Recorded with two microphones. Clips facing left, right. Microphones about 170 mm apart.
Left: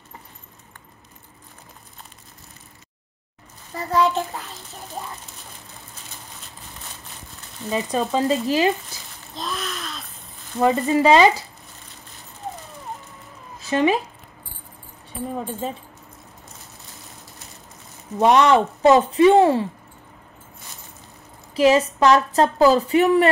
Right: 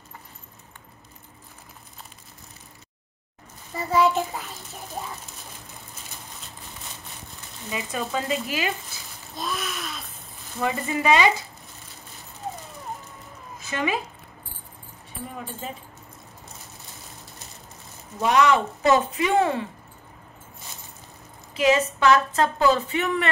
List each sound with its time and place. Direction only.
3.7 s a child's voice: 5° right (ahead or behind)
7.7 s a woman's voice: 35° left (ahead or behind)
9.3 s a sound: 5° right (ahead or behind)
10.6 s a woman's voice: 30° left (ahead or behind)
13.7 s speech: 35° left (ahead or behind)
18.2 s a woman's voice: 30° left (ahead or behind)
21.5 s a woman's voice: 35° left (ahead or behind)